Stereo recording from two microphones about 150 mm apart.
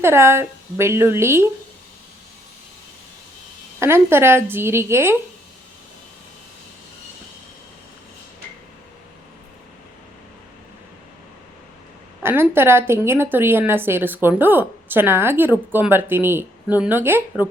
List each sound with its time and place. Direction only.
0.0 s a woman's voice: 15° right (ahead or behind)
3.8 s a woman's voice: 15° right (ahead or behind)
12.2 s a woman's voice: 15° right (ahead or behind)